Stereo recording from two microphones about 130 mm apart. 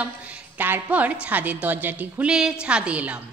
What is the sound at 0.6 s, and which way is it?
A woman's voice, 15° right (ahead or behind).